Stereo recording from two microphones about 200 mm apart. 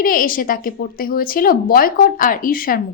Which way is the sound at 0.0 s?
45° left (ahead or behind).